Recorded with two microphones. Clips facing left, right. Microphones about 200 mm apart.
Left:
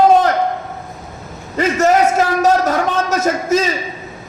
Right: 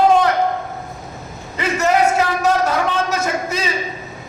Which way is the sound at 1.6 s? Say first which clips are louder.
Left 3 dB; 45° left (ahead or behind).